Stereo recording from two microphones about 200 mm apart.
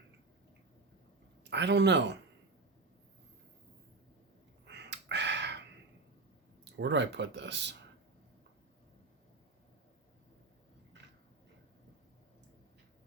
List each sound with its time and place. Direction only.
1.5 s speech: 60° right (ahead or behind)
4.6 s a sound: 60° right (ahead or behind)
6.7 s speech: 60° right (ahead or behind)